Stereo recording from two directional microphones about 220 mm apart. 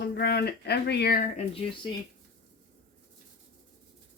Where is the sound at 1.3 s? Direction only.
25° left (ahead or behind).